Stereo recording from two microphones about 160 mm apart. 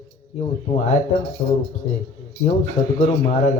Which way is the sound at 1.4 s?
40° left (ahead or behind).